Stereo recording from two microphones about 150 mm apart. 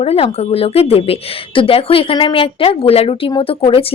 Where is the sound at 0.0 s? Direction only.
40° left (ahead or behind).